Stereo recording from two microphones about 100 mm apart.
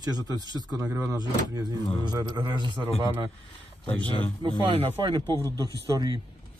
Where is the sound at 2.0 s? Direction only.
45° right (ahead or behind).